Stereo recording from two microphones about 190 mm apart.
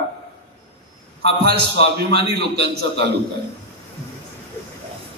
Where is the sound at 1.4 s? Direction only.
60° right (ahead or behind).